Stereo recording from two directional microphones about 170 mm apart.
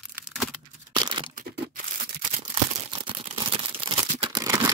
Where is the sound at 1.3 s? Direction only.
55° right (ahead or behind).